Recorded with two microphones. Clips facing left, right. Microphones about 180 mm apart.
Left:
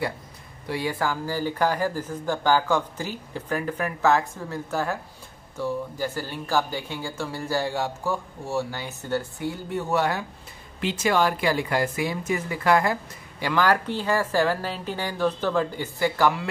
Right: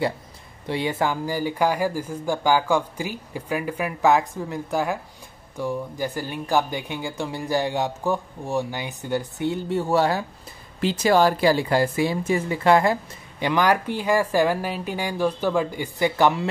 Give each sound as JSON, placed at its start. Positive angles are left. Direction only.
{"t": 0.7, "sound": "speech", "side_deg": -25}